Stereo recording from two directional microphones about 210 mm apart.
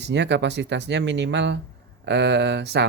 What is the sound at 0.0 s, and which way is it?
Speech, 55° right (ahead or behind).